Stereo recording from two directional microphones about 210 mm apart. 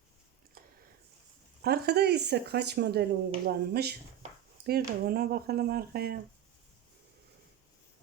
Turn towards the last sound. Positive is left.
turn(degrees=-50)  # may be behind; listen again after turning